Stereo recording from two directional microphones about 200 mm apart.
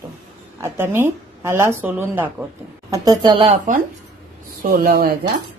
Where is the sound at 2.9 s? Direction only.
20° right (ahead or behind).